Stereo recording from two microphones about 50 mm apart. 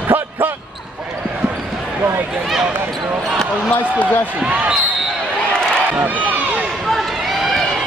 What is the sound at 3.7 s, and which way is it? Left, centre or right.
Speech, left.